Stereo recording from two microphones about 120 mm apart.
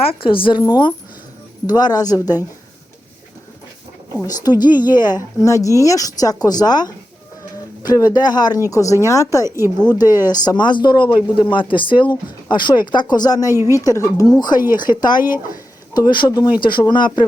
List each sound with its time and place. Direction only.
0.0 s a woman's voice: 50° left (ahead or behind); by 2.4 s 30° left (ahead or behind)
4.4 s a woman's voice: 35° left (ahead or behind)